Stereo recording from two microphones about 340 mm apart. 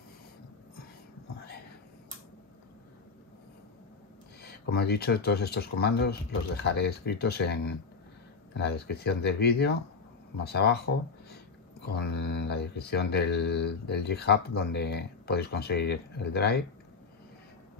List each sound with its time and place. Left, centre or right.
4.4 s speech: left
11.8 s speech: left